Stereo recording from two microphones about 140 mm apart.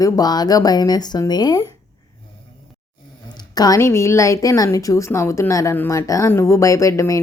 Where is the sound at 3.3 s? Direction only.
30° left (ahead or behind).